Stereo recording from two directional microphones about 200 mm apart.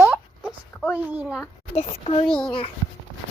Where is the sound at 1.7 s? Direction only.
30° left (ahead or behind).